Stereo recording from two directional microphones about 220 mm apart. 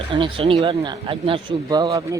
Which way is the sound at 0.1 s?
20° right (ahead or behind).